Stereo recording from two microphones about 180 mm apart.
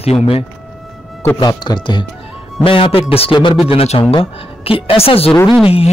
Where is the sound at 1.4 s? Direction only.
25° left (ahead or behind).